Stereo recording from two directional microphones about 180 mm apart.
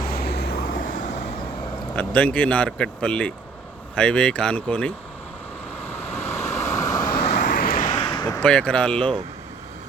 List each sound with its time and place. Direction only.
0.0 s vehicle: 60° left (ahead or behind)
2.0 s speech: 5° left (ahead or behind)
6.0 s vehicle: 10° left (ahead or behind)
7.3 s vehicle: 50° left (ahead or behind); by 8.4 s 25° left (ahead or behind)
8.4 s speech: 5° left (ahead or behind)